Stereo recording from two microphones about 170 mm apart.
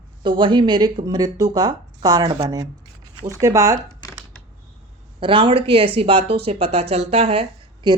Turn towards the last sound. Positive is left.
turn(degrees=-30)  # may be behind; listen again after turning